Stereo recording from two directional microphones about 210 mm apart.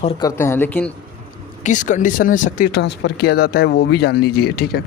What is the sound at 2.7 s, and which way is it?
Speech, 55° left (ahead or behind).